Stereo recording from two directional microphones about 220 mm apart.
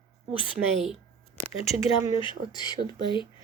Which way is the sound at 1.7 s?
30° left (ahead or behind).